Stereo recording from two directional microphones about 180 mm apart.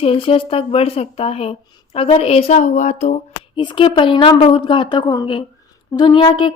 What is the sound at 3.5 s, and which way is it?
A woman's voice, 25° left (ahead or behind).